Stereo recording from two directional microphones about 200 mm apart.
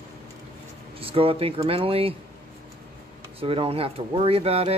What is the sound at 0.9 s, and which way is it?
Speech, 25° right (ahead or behind).